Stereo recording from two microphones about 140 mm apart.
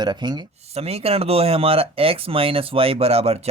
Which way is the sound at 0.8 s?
45° right (ahead or behind).